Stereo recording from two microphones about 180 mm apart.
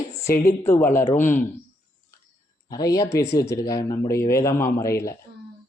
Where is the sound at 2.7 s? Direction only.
20° left (ahead or behind).